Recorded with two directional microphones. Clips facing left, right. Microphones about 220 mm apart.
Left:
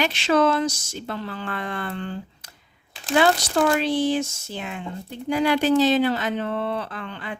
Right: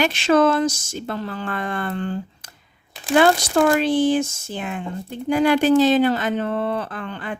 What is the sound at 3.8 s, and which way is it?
Speech, 50° right (ahead or behind).